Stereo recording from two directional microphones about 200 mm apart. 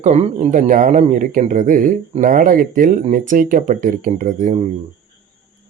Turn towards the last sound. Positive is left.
turn(degrees=-40)  # may be behind; listen again after turning